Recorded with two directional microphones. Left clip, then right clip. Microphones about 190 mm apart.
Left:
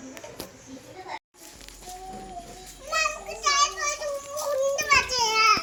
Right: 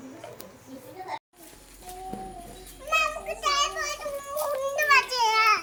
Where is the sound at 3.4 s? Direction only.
5° right (ahead or behind).